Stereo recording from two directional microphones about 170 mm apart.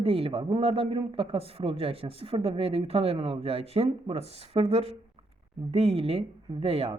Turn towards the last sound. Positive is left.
turn(degrees=-35)  # may be behind; listen again after turning